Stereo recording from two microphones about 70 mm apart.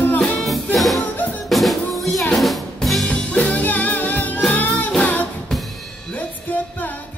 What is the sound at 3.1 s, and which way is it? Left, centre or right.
Music, centre.